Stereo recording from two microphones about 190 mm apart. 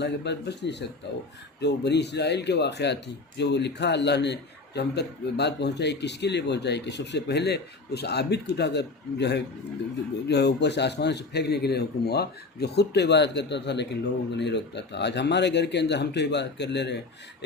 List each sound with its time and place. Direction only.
0.0 s speech: 65° left (ahead or behind)